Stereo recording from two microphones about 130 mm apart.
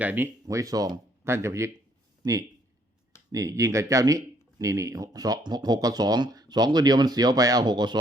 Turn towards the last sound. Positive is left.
turn(degrees=-35)  # may be behind; listen again after turning